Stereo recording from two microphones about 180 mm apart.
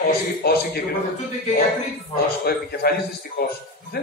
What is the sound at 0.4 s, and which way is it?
Speech, 60° left (ahead or behind).